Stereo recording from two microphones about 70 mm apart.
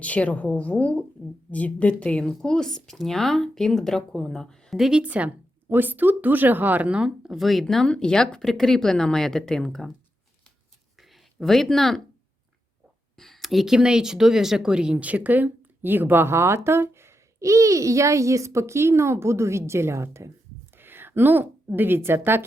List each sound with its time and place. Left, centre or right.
0.0 s a woman's voice: centre
4.8 s speech: centre
10.9 s a sound: centre
13.1 s a woman's voice: centre; by 22.4 s right